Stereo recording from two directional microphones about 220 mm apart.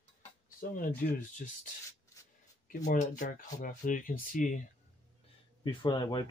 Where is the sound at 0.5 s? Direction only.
40° left (ahead or behind).